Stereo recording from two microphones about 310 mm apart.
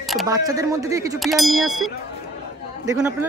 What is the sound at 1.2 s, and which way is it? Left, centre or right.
A man's voice, centre.